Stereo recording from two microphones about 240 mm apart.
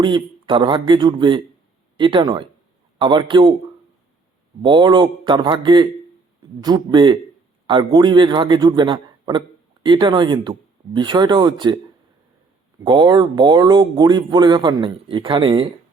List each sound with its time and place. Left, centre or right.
0.0 s speech: centre
4.6 s speech: centre
12.8 s speech: centre